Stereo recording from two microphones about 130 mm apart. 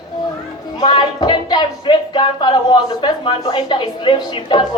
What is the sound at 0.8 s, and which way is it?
Speech, 35° left (ahead or behind).